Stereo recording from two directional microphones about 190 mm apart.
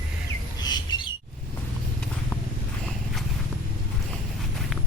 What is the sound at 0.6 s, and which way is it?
Bird, 25° left (ahead or behind).